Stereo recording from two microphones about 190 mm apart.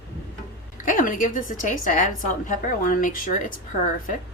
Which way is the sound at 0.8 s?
45° left (ahead or behind).